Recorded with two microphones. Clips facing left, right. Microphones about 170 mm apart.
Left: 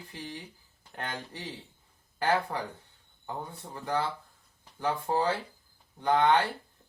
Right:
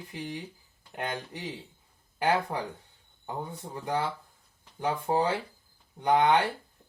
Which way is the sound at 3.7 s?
15° right (ahead or behind).